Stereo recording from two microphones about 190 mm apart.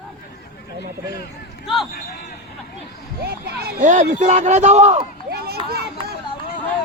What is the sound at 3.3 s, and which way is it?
Speech, 55° right (ahead or behind).